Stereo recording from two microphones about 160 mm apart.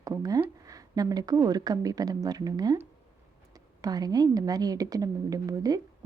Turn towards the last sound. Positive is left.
turn(degrees=-20)  # may be behind; listen again after turning